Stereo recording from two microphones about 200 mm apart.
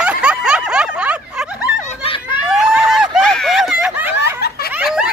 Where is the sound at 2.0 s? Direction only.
25° left (ahead or behind).